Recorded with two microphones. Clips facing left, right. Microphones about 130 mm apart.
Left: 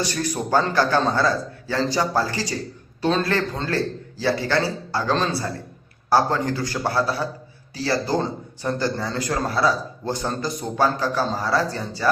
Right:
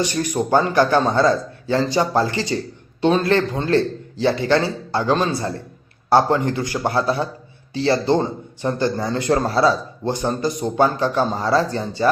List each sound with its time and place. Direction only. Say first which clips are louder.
0.0 s a man's voice: right 4 dB; 20° right (ahead or behind)